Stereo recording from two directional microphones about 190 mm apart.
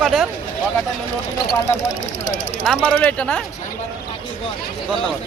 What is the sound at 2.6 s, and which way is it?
Speech, 5° left (ahead or behind).